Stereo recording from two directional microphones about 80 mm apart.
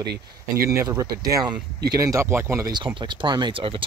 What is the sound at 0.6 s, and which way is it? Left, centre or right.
Speech, right.